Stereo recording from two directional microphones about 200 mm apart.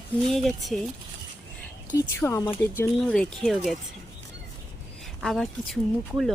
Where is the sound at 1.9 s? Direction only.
15° left (ahead or behind).